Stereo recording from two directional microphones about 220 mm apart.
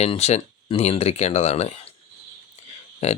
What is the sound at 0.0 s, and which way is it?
Speech, 30° left (ahead or behind).